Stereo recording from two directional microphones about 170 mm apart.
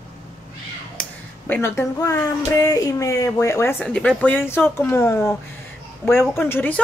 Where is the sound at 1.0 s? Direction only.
5° left (ahead or behind).